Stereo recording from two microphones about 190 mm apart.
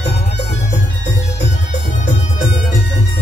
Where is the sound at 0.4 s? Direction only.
35° left (ahead or behind).